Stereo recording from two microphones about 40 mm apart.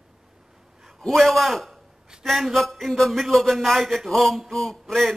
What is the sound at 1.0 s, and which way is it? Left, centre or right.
Speech, centre.